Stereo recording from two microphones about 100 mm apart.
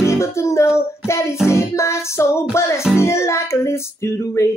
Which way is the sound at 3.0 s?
25° left (ahead or behind).